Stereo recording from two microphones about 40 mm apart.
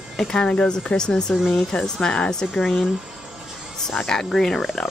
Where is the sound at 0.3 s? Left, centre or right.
Centre.